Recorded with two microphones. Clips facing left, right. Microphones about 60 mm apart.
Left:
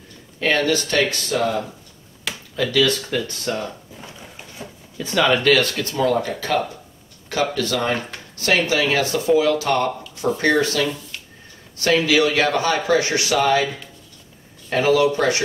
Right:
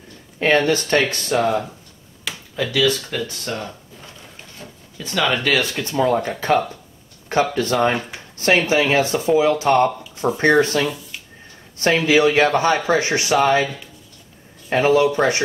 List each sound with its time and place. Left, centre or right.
0.4 s a man's voice: right
2.5 s speech: centre
4.6 s a sound: centre
5.5 s speech: centre
5.9 s a man's voice: right
14.7 s a man's voice: right